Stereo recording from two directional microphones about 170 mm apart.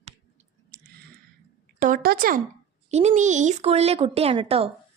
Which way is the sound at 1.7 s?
50° right (ahead or behind).